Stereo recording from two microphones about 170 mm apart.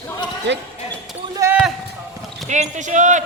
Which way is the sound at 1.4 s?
20° right (ahead or behind).